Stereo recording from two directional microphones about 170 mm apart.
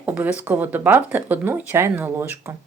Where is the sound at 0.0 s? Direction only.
10° right (ahead or behind).